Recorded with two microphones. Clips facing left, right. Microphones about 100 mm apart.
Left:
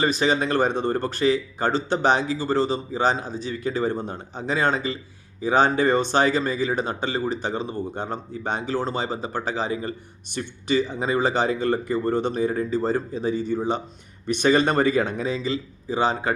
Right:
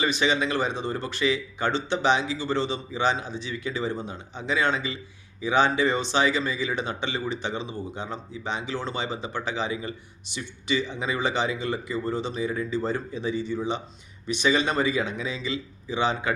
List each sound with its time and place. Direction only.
0.0 s speech: 40° left (ahead or behind)